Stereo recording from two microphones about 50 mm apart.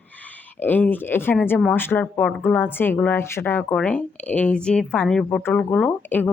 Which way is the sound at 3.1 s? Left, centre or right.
Left.